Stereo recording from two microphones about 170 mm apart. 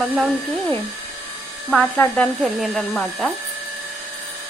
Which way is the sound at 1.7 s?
5° left (ahead or behind).